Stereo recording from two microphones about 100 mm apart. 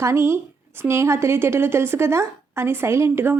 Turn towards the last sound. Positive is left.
turn(degrees=-20)  # may be behind; listen again after turning